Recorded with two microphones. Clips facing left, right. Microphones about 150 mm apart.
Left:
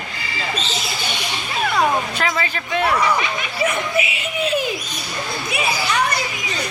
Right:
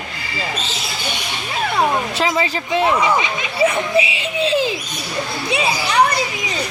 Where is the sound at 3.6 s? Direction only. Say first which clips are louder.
Right 5 dB; 30° right (ahead or behind).